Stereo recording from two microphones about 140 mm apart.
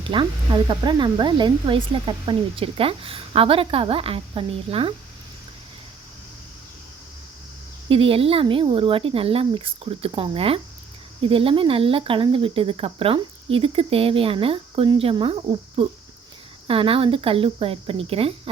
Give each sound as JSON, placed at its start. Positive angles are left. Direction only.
{"t": 0.0, "sound": "speech", "side_deg": -35}
{"t": 7.9, "sound": "speech", "side_deg": -40}